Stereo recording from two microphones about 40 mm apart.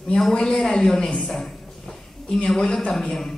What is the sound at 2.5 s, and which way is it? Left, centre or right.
Speech, centre.